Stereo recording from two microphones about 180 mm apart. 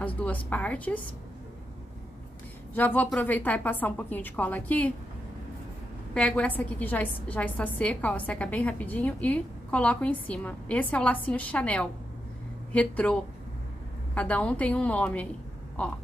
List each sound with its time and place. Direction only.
0.0 s a woman's voice: 10° left (ahead or behind)
2.7 s a woman's voice: 10° left (ahead or behind)
6.1 s a woman's voice: 5° left (ahead or behind)